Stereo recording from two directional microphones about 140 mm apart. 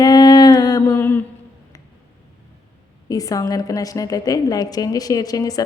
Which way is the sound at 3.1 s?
25° left (ahead or behind).